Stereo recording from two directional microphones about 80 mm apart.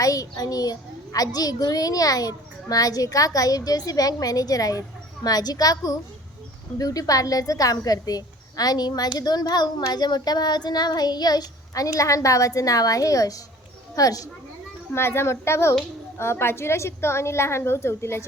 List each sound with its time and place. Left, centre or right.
0.0 s a child's voice: left
9.1 s child singing: left
11.9 s a child's voice: left
14.9 s a woman's voice: left